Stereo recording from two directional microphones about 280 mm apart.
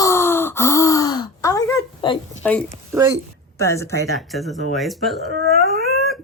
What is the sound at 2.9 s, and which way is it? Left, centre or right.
Speech, centre.